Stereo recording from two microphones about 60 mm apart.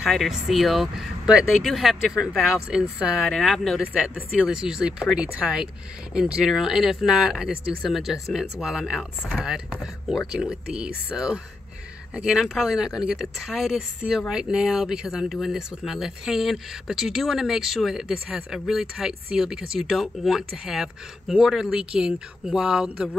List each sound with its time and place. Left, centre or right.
0.0 s speech: centre
3.3 s speech: centre
3.8 s speech: right